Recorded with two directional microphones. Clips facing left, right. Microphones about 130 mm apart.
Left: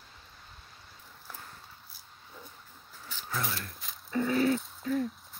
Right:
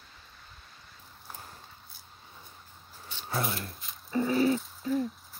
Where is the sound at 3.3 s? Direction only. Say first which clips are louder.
Right 3 dB; 30° right (ahead or behind).